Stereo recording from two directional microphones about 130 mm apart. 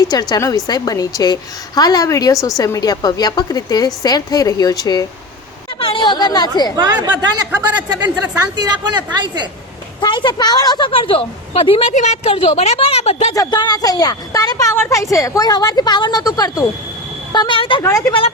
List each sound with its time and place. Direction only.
0.1 s a woman's voice: 30° left (ahead or behind)
5.8 s speech: 40° left (ahead or behind)
6.7 s speech: 30° right (ahead or behind)
8.8 s a woman's voice: 35° right (ahead or behind)
10.0 s a woman's voice: 35° left (ahead or behind); by 13.3 s 55° left (ahead or behind)
13.3 s a woman's voice: 30° left (ahead or behind)
17.8 s a woman's voice: 20° left (ahead or behind)